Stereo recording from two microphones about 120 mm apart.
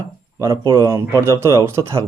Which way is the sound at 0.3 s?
25° right (ahead or behind).